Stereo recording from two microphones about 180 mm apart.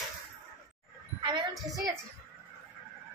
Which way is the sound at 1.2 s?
25° right (ahead or behind).